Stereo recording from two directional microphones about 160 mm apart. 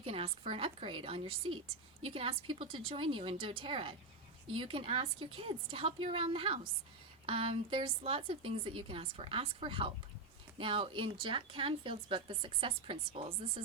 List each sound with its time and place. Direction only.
0.0 s speech: 35° right (ahead or behind)